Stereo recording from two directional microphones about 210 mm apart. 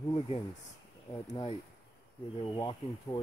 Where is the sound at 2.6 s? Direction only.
20° left (ahead or behind).